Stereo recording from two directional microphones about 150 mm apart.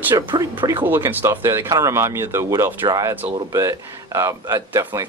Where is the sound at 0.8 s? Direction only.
15° right (ahead or behind).